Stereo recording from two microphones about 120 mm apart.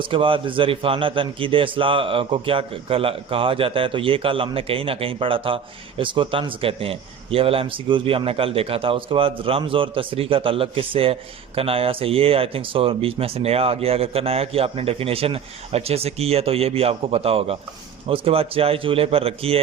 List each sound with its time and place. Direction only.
0.0 s a man's voice: 45° right (ahead or behind)